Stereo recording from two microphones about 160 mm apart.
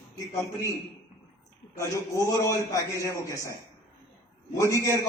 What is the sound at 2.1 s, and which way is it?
A man's voice, 20° left (ahead or behind).